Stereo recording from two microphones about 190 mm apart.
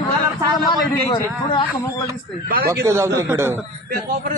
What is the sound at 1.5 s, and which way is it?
Speech, 25° left (ahead or behind).